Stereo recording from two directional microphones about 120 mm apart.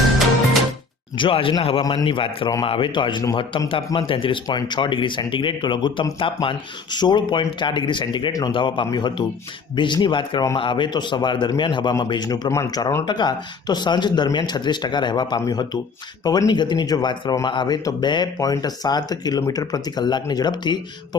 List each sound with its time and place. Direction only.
1.1 s speech: 45° left (ahead or behind)
8.3 s speech: 30° left (ahead or behind)
8.5 s speech: 40° left (ahead or behind)